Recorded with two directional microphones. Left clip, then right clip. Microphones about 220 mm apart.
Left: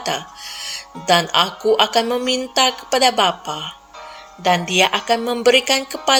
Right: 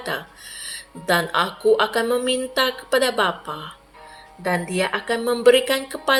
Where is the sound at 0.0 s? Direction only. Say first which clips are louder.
Left 4 dB; 35° left (ahead or behind).